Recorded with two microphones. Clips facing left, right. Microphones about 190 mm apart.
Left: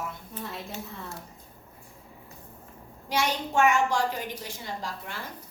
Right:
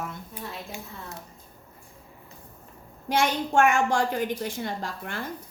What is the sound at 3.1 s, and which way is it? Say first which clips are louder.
A woman's voice: right 4 dB; 55° right (ahead or behind).